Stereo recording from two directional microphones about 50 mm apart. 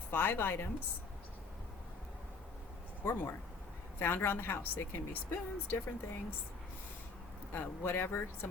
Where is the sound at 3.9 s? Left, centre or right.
Left.